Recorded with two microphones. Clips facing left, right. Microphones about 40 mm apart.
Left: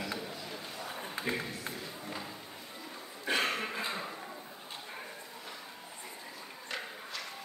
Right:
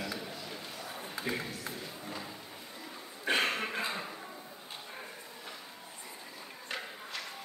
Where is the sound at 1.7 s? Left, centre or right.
Centre.